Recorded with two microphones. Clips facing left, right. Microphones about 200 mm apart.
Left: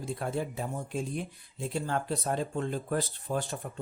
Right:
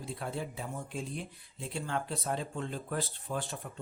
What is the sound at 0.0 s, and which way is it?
Speech, 45° left (ahead or behind).